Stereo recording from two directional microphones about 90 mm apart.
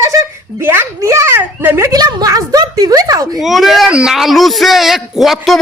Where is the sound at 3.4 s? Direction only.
5° right (ahead or behind).